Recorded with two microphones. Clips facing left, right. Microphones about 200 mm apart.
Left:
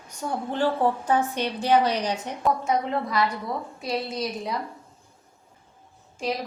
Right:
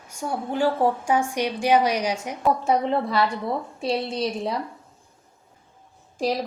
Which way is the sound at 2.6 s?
30° right (ahead or behind).